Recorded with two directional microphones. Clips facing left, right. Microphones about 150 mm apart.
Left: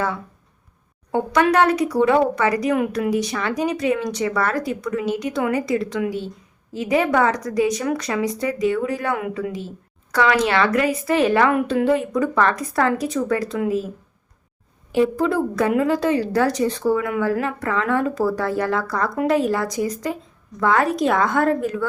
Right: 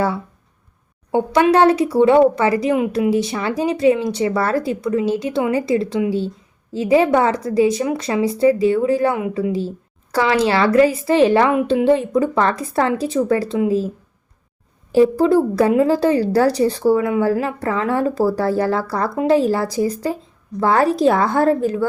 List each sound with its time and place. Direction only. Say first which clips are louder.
1.1 s a woman's voice: right 3 dB; 25° right (ahead or behind)
14.9 s a woman's voice: right 6 dB; 35° right (ahead or behind)